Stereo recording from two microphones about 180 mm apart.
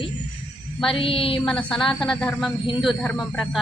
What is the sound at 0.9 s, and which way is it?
Speech, 30° left (ahead or behind).